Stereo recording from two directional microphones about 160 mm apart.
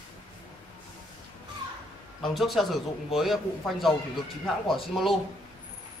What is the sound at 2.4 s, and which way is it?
A man's voice, centre (ahead or behind).